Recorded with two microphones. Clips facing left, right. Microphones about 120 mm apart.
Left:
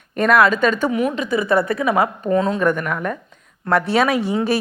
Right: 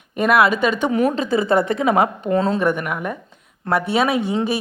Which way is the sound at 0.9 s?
35° right (ahead or behind).